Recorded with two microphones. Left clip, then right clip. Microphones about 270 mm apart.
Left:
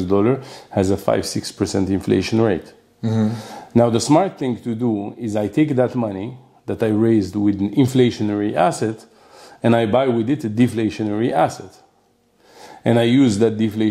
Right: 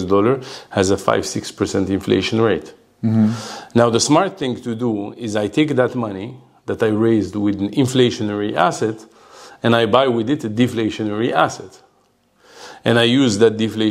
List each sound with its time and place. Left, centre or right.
0.0 s speech: right
3.0 s speech: left
3.3 s speech: right